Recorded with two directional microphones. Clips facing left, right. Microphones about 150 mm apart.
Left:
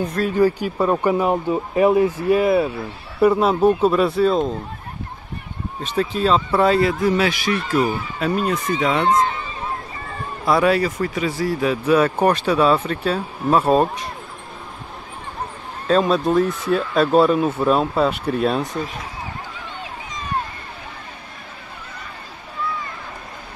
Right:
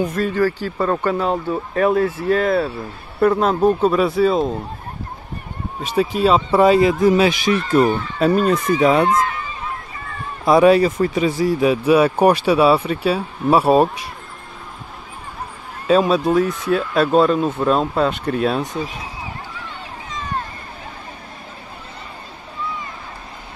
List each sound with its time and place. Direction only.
0.0 s speech: centre (ahead or behind)
0.3 s speech: 15° left (ahead or behind); by 4.6 s 5° right (ahead or behind)
5.8 s speech: 10° right (ahead or behind)
9.0 s speech: 30° left (ahead or behind)
10.4 s speech: 20° right (ahead or behind)
15.9 s speech: 5° right (ahead or behind)